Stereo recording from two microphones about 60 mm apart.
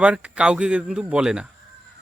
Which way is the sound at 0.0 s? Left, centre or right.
Centre.